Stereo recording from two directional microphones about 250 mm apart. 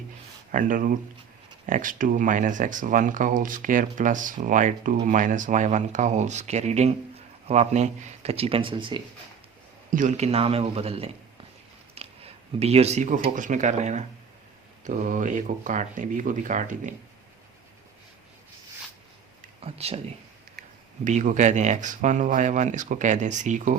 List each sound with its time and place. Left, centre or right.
0.5 s speech: right
19.6 s speech: right